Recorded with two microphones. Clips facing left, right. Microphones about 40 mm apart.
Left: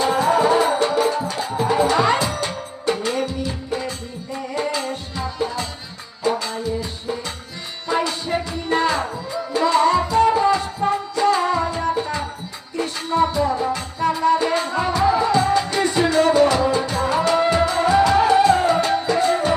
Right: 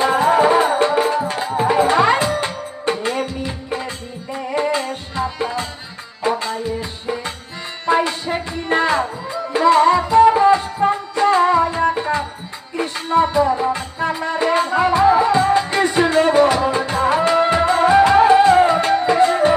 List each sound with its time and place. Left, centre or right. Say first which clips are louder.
0.0 s music: right 3 dB; right